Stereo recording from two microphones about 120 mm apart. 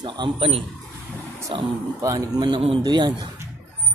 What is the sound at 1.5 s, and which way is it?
Speech, 35° right (ahead or behind).